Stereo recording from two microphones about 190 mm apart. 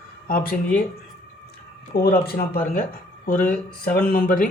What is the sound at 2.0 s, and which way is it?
Speech, 55° left (ahead or behind).